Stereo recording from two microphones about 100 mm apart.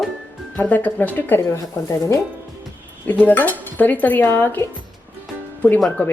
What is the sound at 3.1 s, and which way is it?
Speech, 15° left (ahead or behind).